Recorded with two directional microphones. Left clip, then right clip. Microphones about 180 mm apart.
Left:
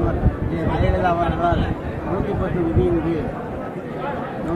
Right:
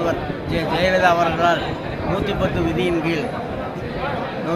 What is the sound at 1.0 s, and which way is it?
Speech, 25° right (ahead or behind).